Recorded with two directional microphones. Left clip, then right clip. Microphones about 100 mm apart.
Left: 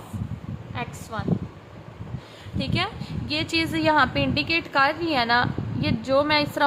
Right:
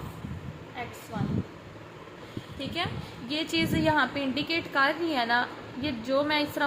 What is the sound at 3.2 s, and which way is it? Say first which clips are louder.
A woman's voice: left 4 dB; 25° left (ahead or behind).